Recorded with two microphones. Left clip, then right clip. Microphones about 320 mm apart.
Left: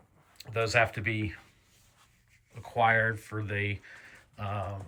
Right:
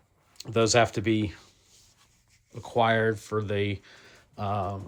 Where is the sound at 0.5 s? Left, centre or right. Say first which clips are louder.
Right 4 dB; centre.